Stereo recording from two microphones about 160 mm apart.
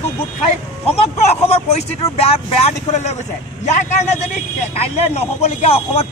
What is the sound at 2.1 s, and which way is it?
A man's voice, 40° left (ahead or behind).